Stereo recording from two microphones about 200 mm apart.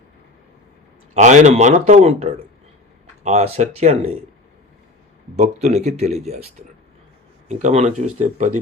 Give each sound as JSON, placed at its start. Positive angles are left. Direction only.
{"t": 1.1, "sound": "speech", "side_deg": -35}
{"t": 5.4, "sound": "speech", "side_deg": -35}